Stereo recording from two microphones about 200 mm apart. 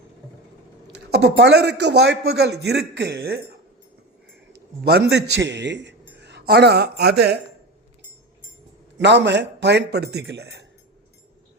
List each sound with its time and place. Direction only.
1.4 s a man's voice: 60° right (ahead or behind)
4.8 s a man's voice: 55° right (ahead or behind)
9.0 s a man's voice: 60° right (ahead or behind)